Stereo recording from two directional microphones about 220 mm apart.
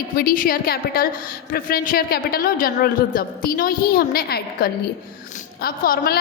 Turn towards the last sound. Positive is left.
turn(degrees=45)  # may be behind; listen again after turning